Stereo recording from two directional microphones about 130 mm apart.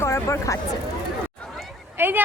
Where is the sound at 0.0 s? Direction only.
20° left (ahead or behind).